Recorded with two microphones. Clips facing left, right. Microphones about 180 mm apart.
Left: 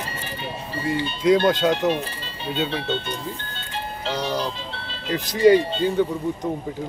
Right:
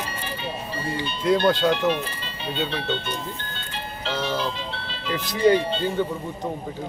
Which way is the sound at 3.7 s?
40° left (ahead or behind).